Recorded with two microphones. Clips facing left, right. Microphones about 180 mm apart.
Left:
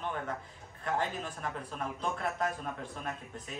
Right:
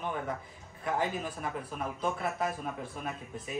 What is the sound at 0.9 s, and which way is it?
Speech, 10° right (ahead or behind).